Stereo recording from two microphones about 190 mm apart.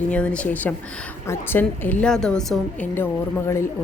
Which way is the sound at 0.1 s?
5° left (ahead or behind).